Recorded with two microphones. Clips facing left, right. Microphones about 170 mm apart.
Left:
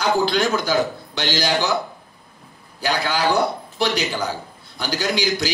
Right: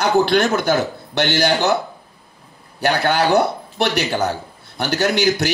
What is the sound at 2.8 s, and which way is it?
A man's voice, 60° right (ahead or behind).